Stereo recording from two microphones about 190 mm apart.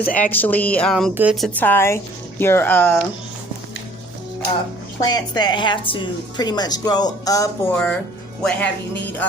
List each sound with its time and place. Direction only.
0.1 s speech: 10° left (ahead or behind); by 1.5 s 5° right (ahead or behind)
1.5 s speech: 10° left (ahead or behind)
5.0 s a woman's voice: 20° left (ahead or behind)
7.7 s speech: 5° left (ahead or behind)